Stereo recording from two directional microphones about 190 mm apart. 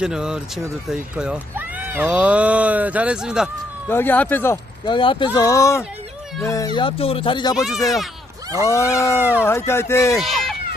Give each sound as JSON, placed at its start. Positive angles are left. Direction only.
{"t": 0.0, "sound": "speech", "side_deg": -5}
{"t": 3.8, "sound": "speech", "side_deg": 10}
{"t": 4.9, "sound": "speech", "side_deg": 25}
{"t": 6.7, "sound": "speech", "side_deg": 30}
{"t": 7.5, "sound": "speech", "side_deg": 0}
{"t": 8.6, "sound": "speech", "side_deg": 15}
{"t": 10.2, "sound": "a sound", "side_deg": 0}